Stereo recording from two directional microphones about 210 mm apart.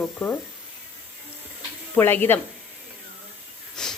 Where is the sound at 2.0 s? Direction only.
10° left (ahead or behind).